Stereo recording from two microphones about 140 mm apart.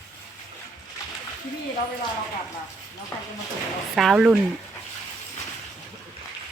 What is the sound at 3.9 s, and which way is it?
Speech, 5° right (ahead or behind).